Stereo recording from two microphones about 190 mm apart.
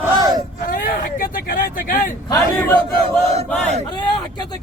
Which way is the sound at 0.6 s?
50° left (ahead or behind).